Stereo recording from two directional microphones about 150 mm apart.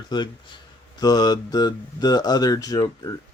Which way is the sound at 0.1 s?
30° left (ahead or behind).